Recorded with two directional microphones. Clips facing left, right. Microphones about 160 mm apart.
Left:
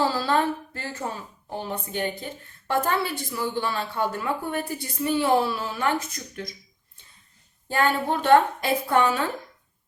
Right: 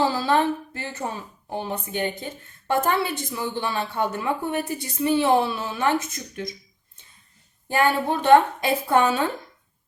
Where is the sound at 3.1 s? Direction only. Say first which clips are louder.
Even; 20° right (ahead or behind).